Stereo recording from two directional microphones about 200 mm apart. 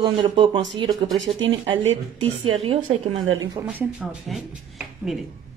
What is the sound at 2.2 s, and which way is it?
Speech, 30° right (ahead or behind).